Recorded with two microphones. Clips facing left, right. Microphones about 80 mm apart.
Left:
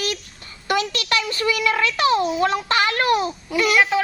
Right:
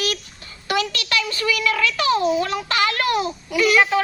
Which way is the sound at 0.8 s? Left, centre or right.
Left.